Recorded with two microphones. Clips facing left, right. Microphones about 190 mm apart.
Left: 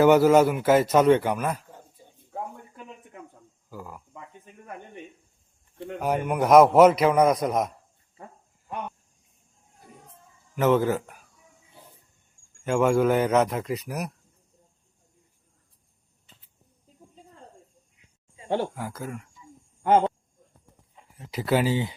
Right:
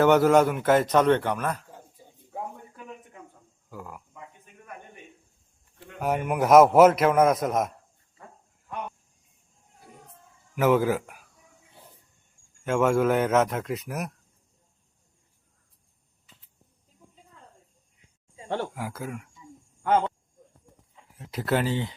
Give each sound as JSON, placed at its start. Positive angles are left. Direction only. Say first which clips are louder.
{"t": 0.0, "sound": "a man's voice", "louder": "left 2 dB", "side_deg": 5}
{"t": 3.7, "sound": "a sound", "louder": "left 1 dB", "side_deg": 0}
{"t": 6.0, "sound": "a man's voice", "louder": "even", "side_deg": 0}
{"t": 10.5, "sound": "speech", "louder": "even", "side_deg": -5}
{"t": 12.6, "sound": "a man's voice", "louder": "left 1 dB", "side_deg": 0}
{"t": 18.4, "sound": "speech", "louder": "left 4 dB", "side_deg": 15}
{"t": 18.7, "sound": "a man's voice", "louder": "even", "side_deg": -5}
{"t": 19.8, "sound": "speech", "louder": "left 3 dB", "side_deg": 20}
{"t": 21.2, "sound": "a man's voice", "louder": "left 2 dB", "side_deg": 0}